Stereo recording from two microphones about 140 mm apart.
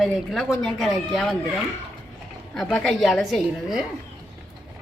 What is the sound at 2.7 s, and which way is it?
A woman's voice, centre (ahead or behind).